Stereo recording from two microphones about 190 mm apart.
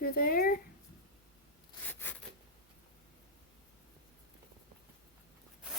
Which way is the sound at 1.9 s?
10° left (ahead or behind).